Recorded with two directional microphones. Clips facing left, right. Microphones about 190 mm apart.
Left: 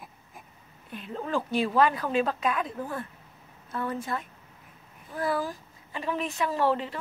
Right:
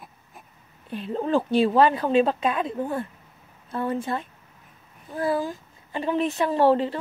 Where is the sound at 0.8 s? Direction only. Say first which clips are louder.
Right 7 dB; 30° right (ahead or behind).